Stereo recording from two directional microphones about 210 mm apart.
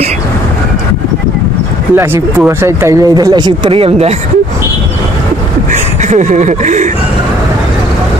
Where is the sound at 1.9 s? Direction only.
10° right (ahead or behind); by 4.1 s 30° right (ahead or behind).